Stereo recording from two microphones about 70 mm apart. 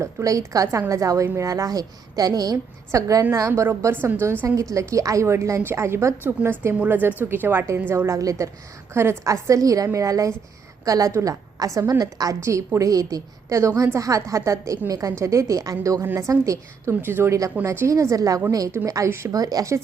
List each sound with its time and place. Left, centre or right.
0.0 s a woman's voice: right
2.9 s a woman's voice: right
3.9 s a woman's voice: right
6.2 s a woman's voice: right
8.2 s a woman's voice: right
8.9 s a woman's voice: right
12.4 s a woman's voice: right
16.9 s a woman's voice: right
17.6 s a woman's voice: right
19.0 s a woman's voice: right
19.3 s a woman's voice: right